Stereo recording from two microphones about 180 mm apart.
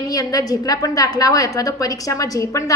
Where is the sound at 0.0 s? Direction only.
20° left (ahead or behind).